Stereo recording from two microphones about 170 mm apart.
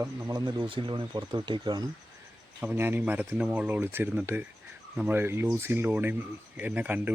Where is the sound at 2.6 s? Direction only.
10° right (ahead or behind).